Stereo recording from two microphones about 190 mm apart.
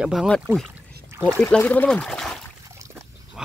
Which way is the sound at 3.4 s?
5° right (ahead or behind).